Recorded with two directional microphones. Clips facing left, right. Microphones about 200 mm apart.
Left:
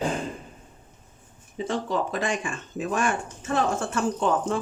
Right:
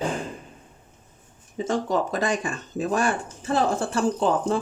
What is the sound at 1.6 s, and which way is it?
Speech, 45° right (ahead or behind).